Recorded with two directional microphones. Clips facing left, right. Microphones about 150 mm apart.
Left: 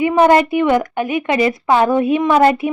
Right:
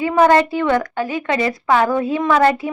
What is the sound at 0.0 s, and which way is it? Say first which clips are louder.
A woman's voice: left 2 dB; 20° left (ahead or behind).